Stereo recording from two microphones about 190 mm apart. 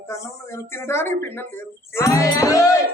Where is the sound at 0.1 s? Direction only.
15° left (ahead or behind).